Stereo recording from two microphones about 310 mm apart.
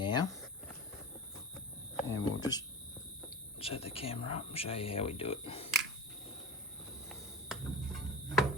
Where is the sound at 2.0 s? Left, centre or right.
Centre.